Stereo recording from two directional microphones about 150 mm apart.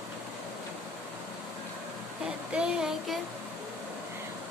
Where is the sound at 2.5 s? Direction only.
5° right (ahead or behind).